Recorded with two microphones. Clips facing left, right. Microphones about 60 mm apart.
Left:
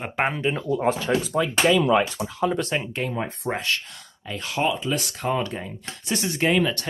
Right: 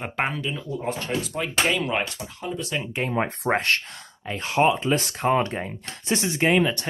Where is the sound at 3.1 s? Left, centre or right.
Right.